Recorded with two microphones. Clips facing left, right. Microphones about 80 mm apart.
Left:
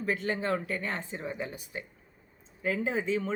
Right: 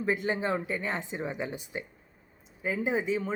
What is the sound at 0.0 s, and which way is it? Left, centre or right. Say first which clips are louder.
Speech: right 2 dB; centre.